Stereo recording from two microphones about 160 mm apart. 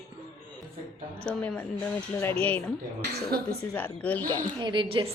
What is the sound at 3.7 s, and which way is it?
Speech, 10° left (ahead or behind).